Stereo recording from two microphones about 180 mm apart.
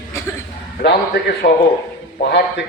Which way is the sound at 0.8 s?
60° left (ahead or behind).